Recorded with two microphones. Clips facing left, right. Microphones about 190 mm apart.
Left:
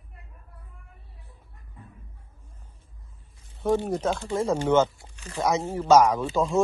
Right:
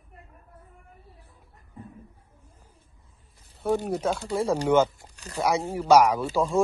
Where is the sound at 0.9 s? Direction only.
Centre (ahead or behind).